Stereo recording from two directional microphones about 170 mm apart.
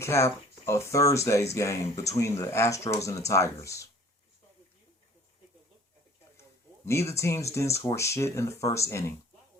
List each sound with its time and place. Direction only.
0.0 s speech: 15° left (ahead or behind)
6.8 s speech: 15° left (ahead or behind)